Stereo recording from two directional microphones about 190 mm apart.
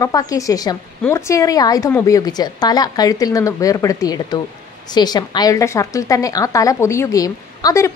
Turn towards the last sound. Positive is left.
turn(degrees=15)  # may be behind; listen again after turning